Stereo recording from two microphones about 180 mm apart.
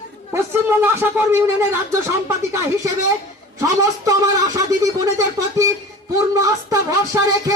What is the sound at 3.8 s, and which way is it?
Music, 20° right (ahead or behind).